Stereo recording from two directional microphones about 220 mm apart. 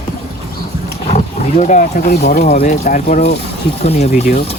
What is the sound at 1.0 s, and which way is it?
Roaring cats, 30° left (ahead or behind).